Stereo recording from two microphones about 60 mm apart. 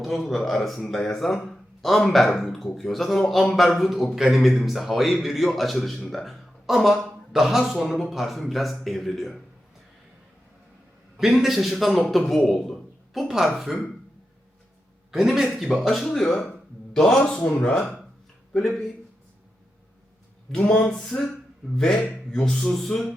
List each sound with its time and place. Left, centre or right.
0.0 s a man's voice: centre
11.2 s a man's voice: centre
15.1 s a man's voice: centre
18.5 s a man's voice: centre
20.5 s speech: centre